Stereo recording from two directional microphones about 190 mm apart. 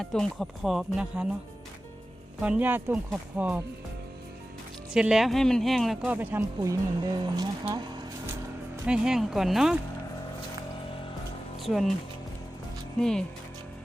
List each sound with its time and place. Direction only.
0.0 s speech: 5° left (ahead or behind)
2.4 s speech: 10° right (ahead or behind)
4.9 s speech: 5° right (ahead or behind)
6.1 s speech: 15° right (ahead or behind)
8.9 s speech: 5° right (ahead or behind)
11.6 s speech: centre (ahead or behind)
13.0 s speech: 5° left (ahead or behind)